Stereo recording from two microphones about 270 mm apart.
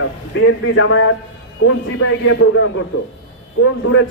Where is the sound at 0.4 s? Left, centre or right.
Left.